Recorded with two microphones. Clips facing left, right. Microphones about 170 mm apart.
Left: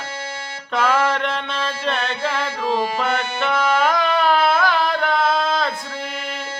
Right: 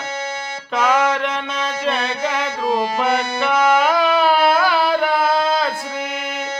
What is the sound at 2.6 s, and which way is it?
Music, 40° right (ahead or behind).